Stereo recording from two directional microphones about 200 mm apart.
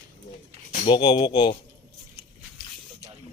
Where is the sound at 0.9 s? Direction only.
20° left (ahead or behind).